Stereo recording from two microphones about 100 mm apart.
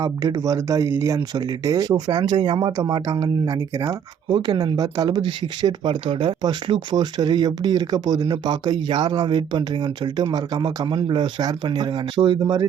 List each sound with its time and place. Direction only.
0.0 s speech: 40° right (ahead or behind)